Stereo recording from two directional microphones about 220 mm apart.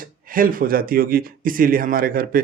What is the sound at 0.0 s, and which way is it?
Speech, 40° right (ahead or behind).